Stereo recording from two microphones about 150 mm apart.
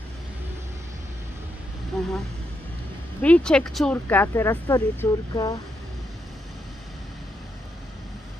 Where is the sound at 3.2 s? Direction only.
5° left (ahead or behind); by 5.6 s 25° left (ahead or behind).